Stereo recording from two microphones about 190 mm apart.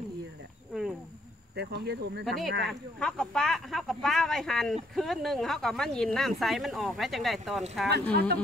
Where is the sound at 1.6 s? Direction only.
60° right (ahead or behind).